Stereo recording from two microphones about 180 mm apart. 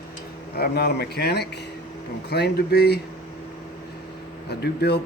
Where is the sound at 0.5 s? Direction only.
60° left (ahead or behind).